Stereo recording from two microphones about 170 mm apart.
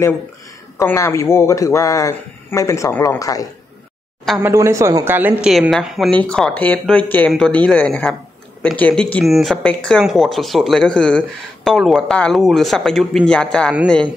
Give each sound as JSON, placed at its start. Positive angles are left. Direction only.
{"t": 0.7, "sound": "a man's voice", "side_deg": 15}
{"t": 4.4, "sound": "speech", "side_deg": -15}